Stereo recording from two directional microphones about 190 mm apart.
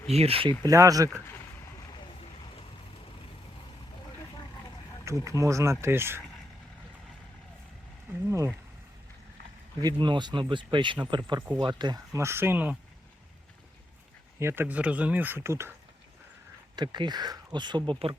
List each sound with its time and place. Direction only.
0.1 s speech: 30° right (ahead or behind)
0.7 s speech: 15° right (ahead or behind)
5.2 s speech: 15° right (ahead or behind)
8.3 s speech: 15° right (ahead or behind)
9.8 s speech: 25° right (ahead or behind)
14.3 s speech: 10° right (ahead or behind)
16.7 s speech: 25° right (ahead or behind)